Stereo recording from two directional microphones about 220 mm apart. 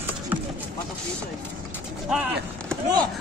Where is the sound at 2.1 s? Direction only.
5° right (ahead or behind).